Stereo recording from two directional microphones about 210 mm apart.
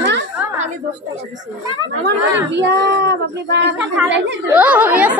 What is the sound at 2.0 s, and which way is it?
A woman's voice, 55° right (ahead or behind).